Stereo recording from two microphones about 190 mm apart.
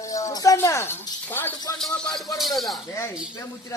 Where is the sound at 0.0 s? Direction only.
15° left (ahead or behind); by 2.7 s centre (ahead or behind).